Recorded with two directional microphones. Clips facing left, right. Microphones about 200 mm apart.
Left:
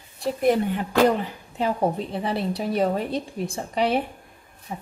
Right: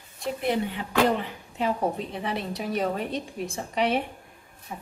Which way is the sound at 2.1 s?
35° left (ahead or behind).